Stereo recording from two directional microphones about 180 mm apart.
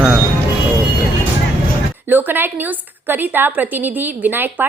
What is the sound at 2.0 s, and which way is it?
A woman's voice, 10° right (ahead or behind).